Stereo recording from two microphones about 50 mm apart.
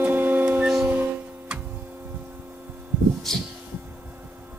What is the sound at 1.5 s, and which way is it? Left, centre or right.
Music, right.